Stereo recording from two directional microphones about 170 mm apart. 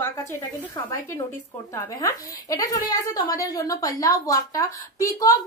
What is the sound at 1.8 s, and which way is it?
A woman's voice, 20° left (ahead or behind).